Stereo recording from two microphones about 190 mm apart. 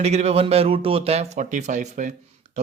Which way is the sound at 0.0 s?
35° right (ahead or behind).